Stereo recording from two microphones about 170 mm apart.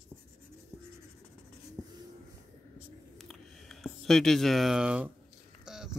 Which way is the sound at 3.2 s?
Centre (ahead or behind).